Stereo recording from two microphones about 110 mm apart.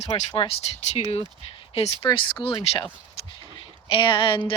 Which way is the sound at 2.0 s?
50° left (ahead or behind).